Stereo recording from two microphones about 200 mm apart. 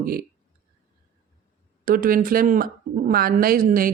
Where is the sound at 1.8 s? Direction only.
45° right (ahead or behind).